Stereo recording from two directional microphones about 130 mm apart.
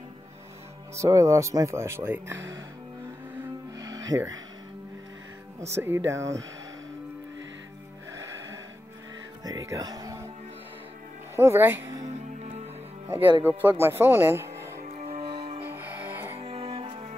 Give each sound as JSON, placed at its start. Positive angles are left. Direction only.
{"t": 0.9, "sound": "speech", "side_deg": -25}
{"t": 3.7, "sound": "music", "side_deg": -25}
{"t": 5.7, "sound": "speech", "side_deg": -20}
{"t": 9.4, "sound": "music", "side_deg": -30}
{"t": 11.3, "sound": "speech", "side_deg": -20}
{"t": 13.4, "sound": "speech", "side_deg": -15}
{"t": 14.8, "sound": "music", "side_deg": -55}
{"t": 15.2, "sound": "music", "side_deg": -45}
{"t": 15.6, "sound": "music", "side_deg": -15}
{"t": 16.3, "sound": "music", "side_deg": -45}